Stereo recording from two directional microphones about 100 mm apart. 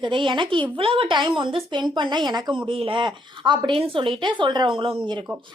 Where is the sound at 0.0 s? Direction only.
55° right (ahead or behind).